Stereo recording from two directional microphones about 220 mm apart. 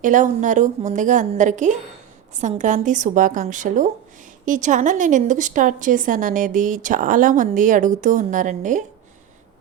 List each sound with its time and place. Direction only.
0.0 s a woman's voice: 35° right (ahead or behind)